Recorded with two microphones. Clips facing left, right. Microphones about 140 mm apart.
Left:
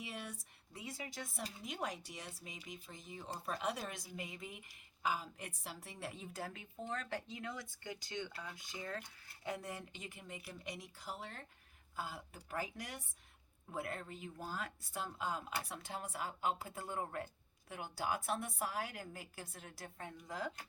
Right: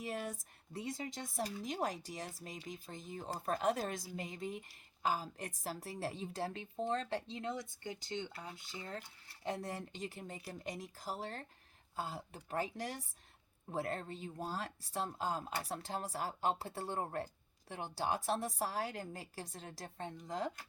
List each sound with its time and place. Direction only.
0.0 s a woman's voice: 45° right (ahead or behind); by 8.5 s 25° right (ahead or behind)
9.4 s a woman's voice: 35° right (ahead or behind)